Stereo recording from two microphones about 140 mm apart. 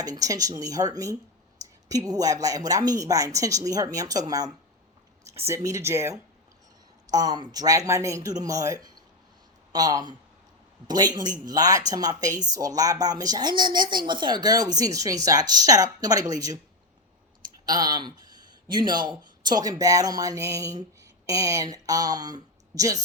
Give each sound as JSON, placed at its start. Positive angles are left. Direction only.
{"t": 0.0, "sound": "a woman's voice", "side_deg": -25}
{"t": 17.7, "sound": "speech", "side_deg": -30}